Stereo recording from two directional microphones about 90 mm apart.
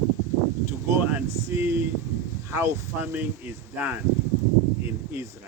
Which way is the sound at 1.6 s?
25° right (ahead or behind).